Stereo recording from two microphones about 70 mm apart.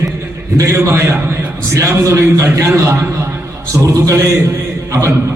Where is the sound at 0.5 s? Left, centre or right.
Right.